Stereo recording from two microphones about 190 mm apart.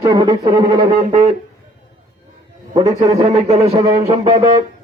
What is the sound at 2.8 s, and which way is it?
A man's voice, 30° right (ahead or behind).